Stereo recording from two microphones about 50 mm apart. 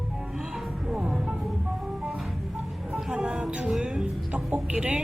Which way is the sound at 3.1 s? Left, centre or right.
Centre.